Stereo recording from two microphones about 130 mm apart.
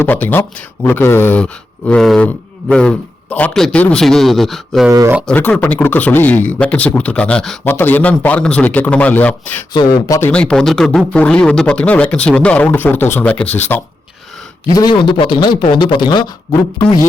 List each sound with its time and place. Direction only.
0.0 s a man's voice: 15° left (ahead or behind)
4.9 s speech: 25° right (ahead or behind)
5.2 s speech: 10° left (ahead or behind)
7.6 s speech: 15° left (ahead or behind)
14.7 s a man's voice: 30° left (ahead or behind)